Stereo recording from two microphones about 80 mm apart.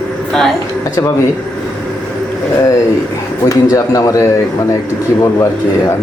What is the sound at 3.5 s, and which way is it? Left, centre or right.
Speech, left.